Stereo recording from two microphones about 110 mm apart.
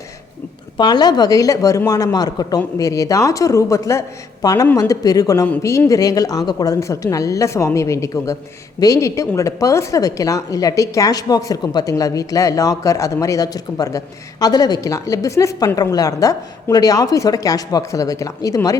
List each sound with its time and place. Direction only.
0.8 s a woman's voice: 40° left (ahead or behind)
6.7 s a woman's voice: 30° left (ahead or behind)